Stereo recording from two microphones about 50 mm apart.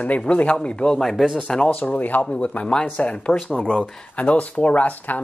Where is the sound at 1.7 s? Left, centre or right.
Left.